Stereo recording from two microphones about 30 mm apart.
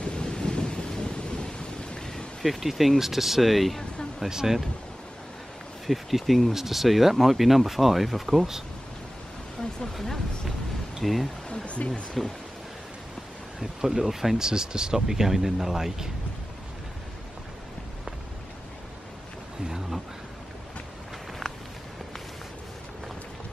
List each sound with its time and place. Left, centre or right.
0.0 s thunder: left
2.4 s speech: centre
4.3 s speech: centre
5.9 s speech: centre
11.0 s speech: centre
11.6 s stream: left
12.2 s speech: centre
13.8 s speech: centre
14.4 s speech: right